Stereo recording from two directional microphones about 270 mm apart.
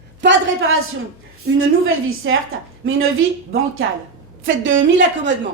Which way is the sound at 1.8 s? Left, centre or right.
Right.